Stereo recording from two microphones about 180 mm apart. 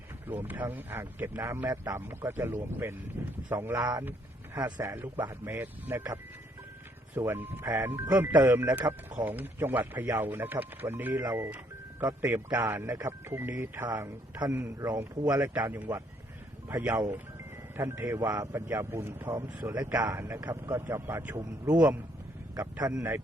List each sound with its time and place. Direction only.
0.4 s speech: 10° right (ahead or behind)
7.2 s speech: 10° right (ahead or behind)
15.5 s a man's voice: 10° right (ahead or behind)